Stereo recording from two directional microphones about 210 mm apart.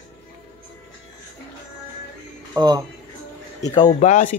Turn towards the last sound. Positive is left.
turn(degrees=35)  # may be behind; listen again after turning